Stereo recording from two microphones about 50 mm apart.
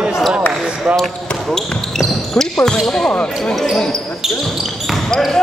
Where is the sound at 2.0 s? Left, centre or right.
Centre.